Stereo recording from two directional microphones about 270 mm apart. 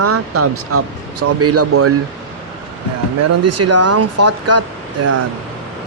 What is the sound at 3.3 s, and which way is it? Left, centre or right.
Speech, right.